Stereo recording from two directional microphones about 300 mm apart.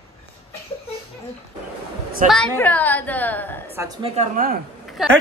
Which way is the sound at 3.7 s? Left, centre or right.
Centre.